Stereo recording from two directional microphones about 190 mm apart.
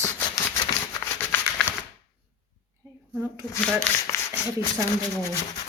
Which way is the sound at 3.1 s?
10° right (ahead or behind).